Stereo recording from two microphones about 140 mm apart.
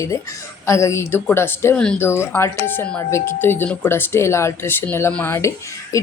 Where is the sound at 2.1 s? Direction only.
15° left (ahead or behind).